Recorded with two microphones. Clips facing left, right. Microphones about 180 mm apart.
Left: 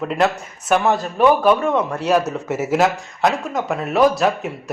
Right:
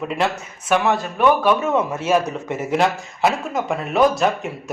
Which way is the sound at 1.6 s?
5° right (ahead or behind).